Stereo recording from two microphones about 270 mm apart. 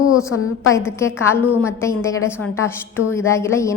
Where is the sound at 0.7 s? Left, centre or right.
Centre.